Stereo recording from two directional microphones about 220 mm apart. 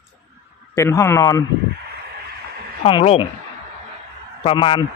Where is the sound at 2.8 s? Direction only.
25° left (ahead or behind).